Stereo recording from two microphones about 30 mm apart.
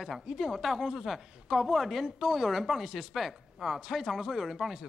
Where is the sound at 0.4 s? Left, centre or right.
Centre.